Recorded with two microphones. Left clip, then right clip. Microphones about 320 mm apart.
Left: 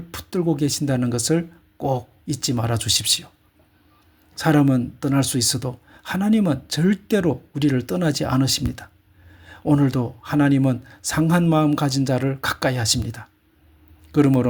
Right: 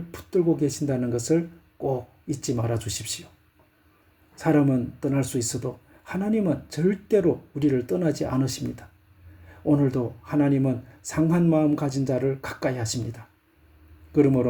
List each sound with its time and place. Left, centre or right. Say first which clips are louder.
0.1 s a sound: left 6 dB; left
0.5 s speech: left 3 dB; left
4.7 s a man's voice: left 4 dB; left